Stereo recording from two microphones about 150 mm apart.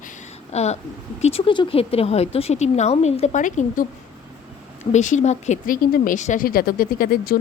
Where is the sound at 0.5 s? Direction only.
45° left (ahead or behind).